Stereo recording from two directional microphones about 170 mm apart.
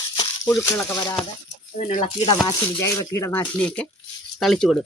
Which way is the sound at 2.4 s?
20° left (ahead or behind).